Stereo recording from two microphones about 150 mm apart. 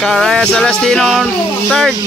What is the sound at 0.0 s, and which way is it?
Speech, centre (ahead or behind).